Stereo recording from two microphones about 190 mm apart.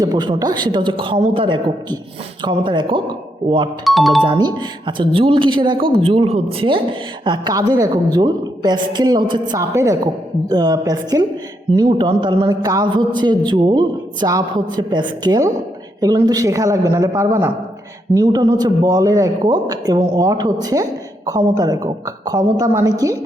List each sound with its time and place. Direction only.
0.0 s speech: 20° right (ahead or behind)
3.8 s speech: centre (ahead or behind)
4.2 s speech: 25° right (ahead or behind)